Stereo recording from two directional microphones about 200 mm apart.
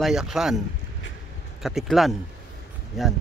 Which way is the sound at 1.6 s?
Centre (ahead or behind).